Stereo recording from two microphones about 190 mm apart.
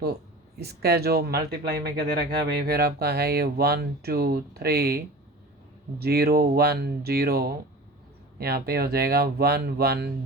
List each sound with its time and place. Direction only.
0.6 s speech: 55° right (ahead or behind)